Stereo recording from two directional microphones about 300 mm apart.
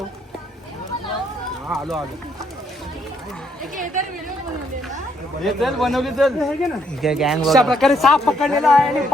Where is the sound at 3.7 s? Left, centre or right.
Right.